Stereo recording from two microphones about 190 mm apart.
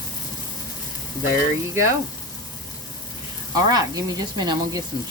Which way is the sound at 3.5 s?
20° right (ahead or behind).